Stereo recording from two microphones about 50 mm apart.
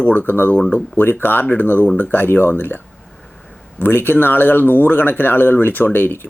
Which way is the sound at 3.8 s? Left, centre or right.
Left.